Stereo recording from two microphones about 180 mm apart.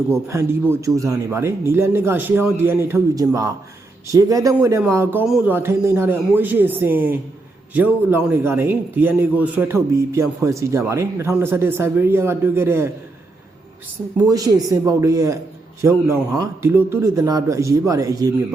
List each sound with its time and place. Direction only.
0.1 s a man's voice: 15° right (ahead or behind)
14.3 s a man's voice: 20° right (ahead or behind)